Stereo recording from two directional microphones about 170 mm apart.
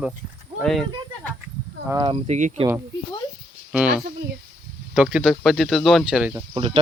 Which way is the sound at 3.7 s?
5° right (ahead or behind).